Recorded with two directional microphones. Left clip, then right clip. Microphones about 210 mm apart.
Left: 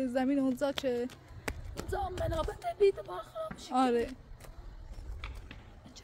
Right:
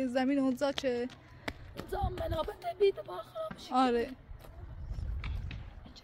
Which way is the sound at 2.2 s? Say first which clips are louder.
Left 1 dB; centre (ahead or behind).